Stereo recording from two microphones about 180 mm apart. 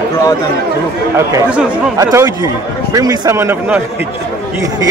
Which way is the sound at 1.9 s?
20° right (ahead or behind).